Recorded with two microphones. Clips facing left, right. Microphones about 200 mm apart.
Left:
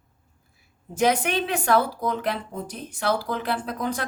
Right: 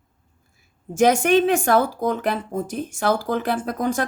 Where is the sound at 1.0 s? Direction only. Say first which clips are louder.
Right 6 dB; 45° right (ahead or behind).